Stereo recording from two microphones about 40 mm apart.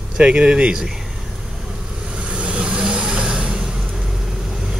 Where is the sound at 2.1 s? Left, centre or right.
Right.